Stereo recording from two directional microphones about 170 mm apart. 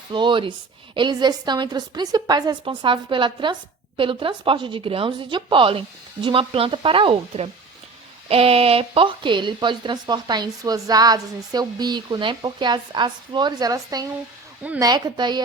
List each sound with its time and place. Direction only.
0.1 s a woman's voice: 30° right (ahead or behind)